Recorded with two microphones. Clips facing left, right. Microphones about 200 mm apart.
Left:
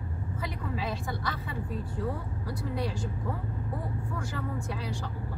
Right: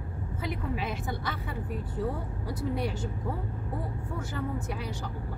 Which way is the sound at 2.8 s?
25° right (ahead or behind).